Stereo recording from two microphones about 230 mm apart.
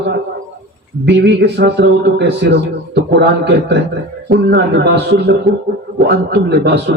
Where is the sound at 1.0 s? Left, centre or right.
Right.